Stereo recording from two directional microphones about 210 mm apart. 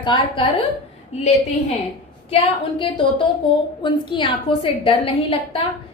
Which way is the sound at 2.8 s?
25° left (ahead or behind).